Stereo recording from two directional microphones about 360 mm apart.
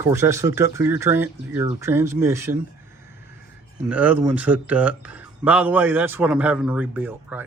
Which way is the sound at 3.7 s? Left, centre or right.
Centre.